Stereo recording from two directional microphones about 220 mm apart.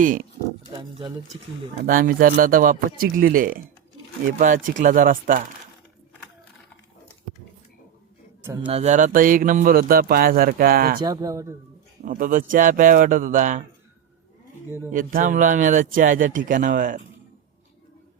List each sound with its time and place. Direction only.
0.0 s speech: 40° right (ahead or behind)
0.7 s speech: 20° right (ahead or behind)
1.8 s speech: 40° right (ahead or behind)
8.6 s speech: 30° right (ahead or behind)
11.0 s speech: 15° right (ahead or behind)
12.0 s speech: 40° right (ahead or behind)
14.9 s speech: 35° right (ahead or behind)